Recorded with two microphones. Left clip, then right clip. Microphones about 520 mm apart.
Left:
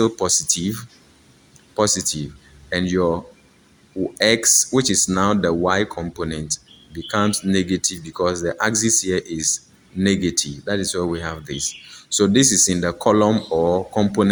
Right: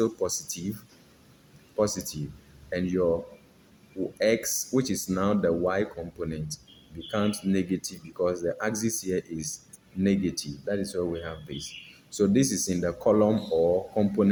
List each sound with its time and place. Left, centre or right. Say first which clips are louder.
0.0 s speech: left 8 dB; right
1.7 s speech: left 8 dB; right
4.2 s speech: left 9 dB; right